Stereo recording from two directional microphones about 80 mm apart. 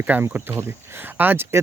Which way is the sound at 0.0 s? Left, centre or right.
Right.